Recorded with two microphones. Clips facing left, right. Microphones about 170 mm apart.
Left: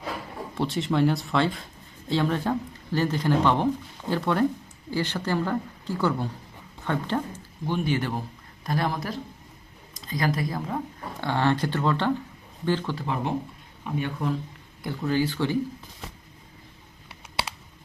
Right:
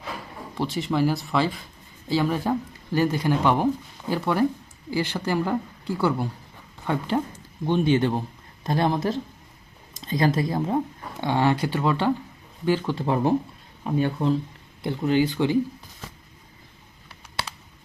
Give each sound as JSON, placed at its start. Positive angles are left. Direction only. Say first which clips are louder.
{"t": 0.5, "sound": "speech", "louder": "even", "side_deg": 0}
{"t": 7.7, "sound": "speech", "louder": "right 6 dB", "side_deg": -20}
{"t": 11.2, "sound": "speech", "louder": "right 2 dB", "side_deg": -15}
{"t": 13.0, "sound": "speech", "louder": "right 6 dB", "side_deg": -30}
{"t": 14.8, "sound": "speech", "louder": "right 4 dB", "side_deg": -20}